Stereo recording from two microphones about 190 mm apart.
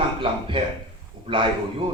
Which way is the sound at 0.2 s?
25° right (ahead or behind).